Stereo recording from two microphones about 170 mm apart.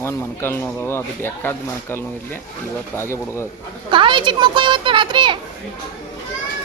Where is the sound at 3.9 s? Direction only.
30° right (ahead or behind).